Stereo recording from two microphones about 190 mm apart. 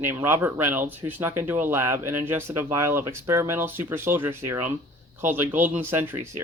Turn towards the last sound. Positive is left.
turn(degrees=-10)  # may be behind; listen again after turning